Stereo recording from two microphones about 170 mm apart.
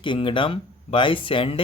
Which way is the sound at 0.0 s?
30° left (ahead or behind).